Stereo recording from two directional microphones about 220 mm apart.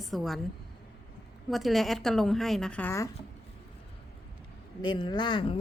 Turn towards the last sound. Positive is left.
turn(degrees=20)  # may be behind; listen again after turning